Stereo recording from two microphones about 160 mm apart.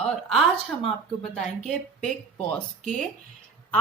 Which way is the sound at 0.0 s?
Centre (ahead or behind).